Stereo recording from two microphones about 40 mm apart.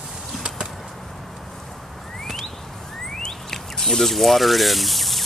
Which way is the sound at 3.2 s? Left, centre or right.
Centre.